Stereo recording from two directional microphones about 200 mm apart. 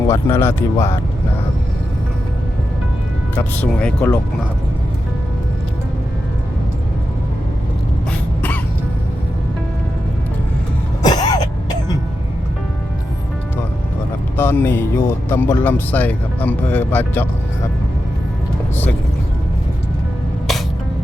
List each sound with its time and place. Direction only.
0.1 s speech: 10° left (ahead or behind)
3.3 s speech: 5° left (ahead or behind)
11.0 s throat clearing: 20° left (ahead or behind)
14.3 s speech: 10° left (ahead or behind)